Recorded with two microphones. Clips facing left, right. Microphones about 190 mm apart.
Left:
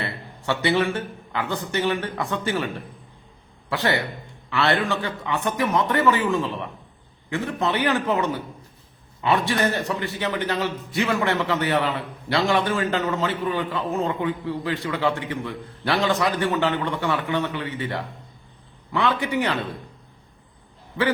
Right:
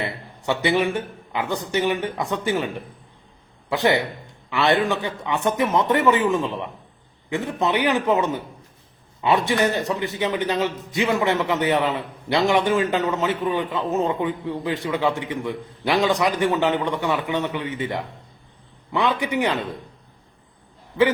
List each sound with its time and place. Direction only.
0.0 s a man's voice: 15° right (ahead or behind)
3.7 s a man's voice: 20° right (ahead or behind)